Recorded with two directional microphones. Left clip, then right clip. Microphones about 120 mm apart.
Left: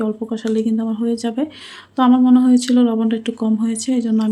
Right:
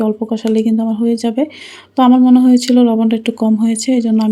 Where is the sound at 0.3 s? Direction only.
35° right (ahead or behind).